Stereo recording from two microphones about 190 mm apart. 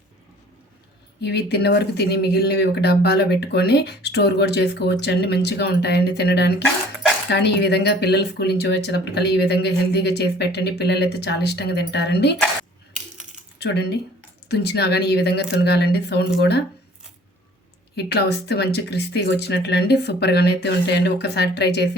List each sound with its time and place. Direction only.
1.2 s speech: 60° left (ahead or behind)
13.6 s speech: 60° left (ahead or behind)
17.9 s speech: 60° left (ahead or behind)